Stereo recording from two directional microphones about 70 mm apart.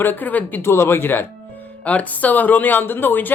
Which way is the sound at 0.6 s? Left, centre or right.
Left.